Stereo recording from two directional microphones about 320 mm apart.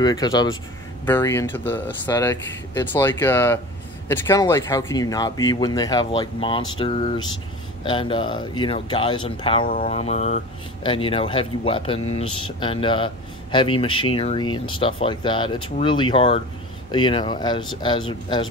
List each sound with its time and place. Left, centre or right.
0.0 s speech: centre